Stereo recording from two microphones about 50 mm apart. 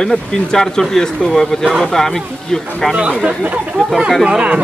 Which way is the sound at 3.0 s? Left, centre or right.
Centre.